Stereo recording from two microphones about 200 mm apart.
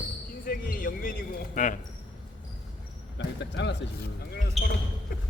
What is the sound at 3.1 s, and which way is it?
Speech, 60° left (ahead or behind).